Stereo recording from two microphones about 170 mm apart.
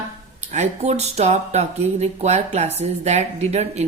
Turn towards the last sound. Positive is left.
turn(degrees=-40)  # may be behind; listen again after turning